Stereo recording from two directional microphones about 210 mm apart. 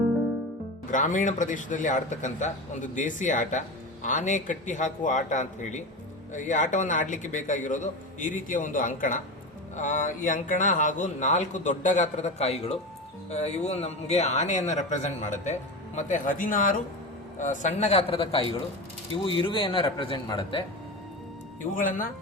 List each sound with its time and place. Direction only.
0.9 s speech: 35° left (ahead or behind); by 20.6 s 20° left (ahead or behind)
21.6 s speech: 40° left (ahead or behind)